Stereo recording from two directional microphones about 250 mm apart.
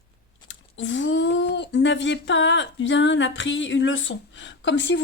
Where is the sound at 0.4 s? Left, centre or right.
Left.